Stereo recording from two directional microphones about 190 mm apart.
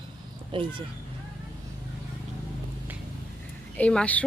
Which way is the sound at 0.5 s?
25° right (ahead or behind).